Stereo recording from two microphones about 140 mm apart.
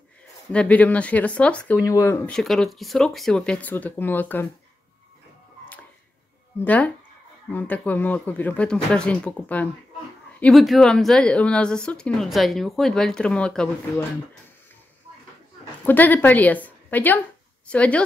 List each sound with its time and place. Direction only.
0.3 s speech: 10° left (ahead or behind)
1.9 s speech: 20° left (ahead or behind)
2.2 s speech: 5° left (ahead or behind)
6.6 s speech: 10° left (ahead or behind)
15.8 s a woman's voice: 10° left (ahead or behind)